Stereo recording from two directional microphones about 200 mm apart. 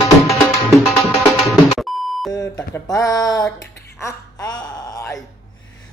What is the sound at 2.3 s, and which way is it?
Speech, 15° left (ahead or behind).